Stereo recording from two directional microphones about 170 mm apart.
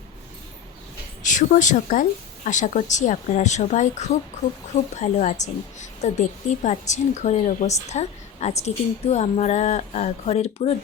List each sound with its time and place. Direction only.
1.2 s a woman's voice: 50° left (ahead or behind)